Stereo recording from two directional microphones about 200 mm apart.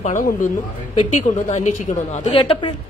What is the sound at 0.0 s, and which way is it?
A woman's voice, 40° left (ahead or behind).